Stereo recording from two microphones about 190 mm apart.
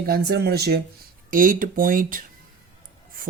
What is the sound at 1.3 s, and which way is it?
Speech, 45° right (ahead or behind).